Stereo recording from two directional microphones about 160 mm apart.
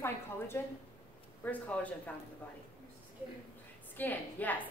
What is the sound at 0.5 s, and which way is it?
A woman's voice, 15° left (ahead or behind).